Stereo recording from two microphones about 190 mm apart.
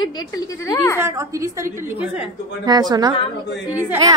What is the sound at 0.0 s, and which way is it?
Speech, 20° left (ahead or behind).